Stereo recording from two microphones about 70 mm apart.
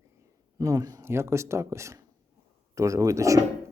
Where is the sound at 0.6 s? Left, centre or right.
Right.